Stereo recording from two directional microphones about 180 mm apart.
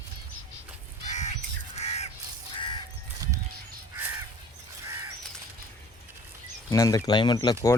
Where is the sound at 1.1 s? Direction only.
40° left (ahead or behind).